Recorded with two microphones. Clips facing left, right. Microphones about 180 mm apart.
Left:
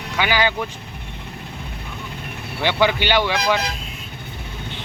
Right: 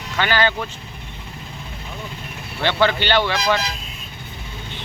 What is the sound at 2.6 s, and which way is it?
Speech, 10° left (ahead or behind).